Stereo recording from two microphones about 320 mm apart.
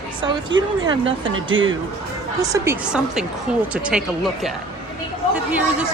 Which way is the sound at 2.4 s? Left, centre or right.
Centre.